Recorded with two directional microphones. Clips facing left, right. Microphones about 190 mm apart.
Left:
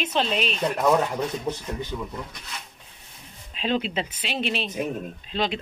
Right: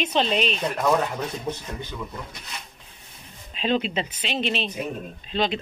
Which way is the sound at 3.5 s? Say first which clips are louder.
Right 2 dB; 5° left (ahead or behind).